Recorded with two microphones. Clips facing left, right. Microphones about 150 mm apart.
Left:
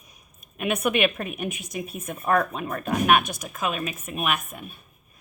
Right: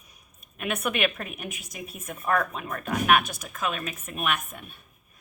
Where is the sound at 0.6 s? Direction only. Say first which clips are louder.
Left 4 dB; 15° left (ahead or behind).